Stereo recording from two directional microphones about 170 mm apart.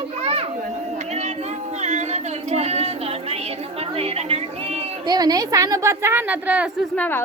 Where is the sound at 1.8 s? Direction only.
40° right (ahead or behind).